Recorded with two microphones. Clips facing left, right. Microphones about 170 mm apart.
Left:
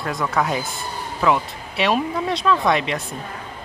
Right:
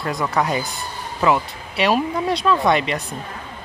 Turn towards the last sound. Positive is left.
turn(degrees=0)  # may be behind; listen again after turning